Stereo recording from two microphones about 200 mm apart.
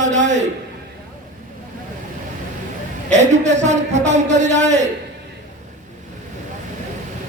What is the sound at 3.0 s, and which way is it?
A man's voice, 35° right (ahead or behind).